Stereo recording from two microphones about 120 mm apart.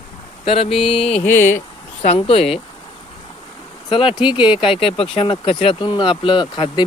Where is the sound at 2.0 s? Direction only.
50° left (ahead or behind).